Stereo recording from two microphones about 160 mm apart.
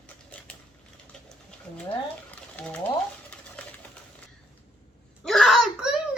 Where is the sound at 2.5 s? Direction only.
5° left (ahead or behind).